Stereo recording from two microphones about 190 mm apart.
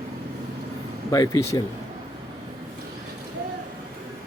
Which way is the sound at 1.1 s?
15° left (ahead or behind).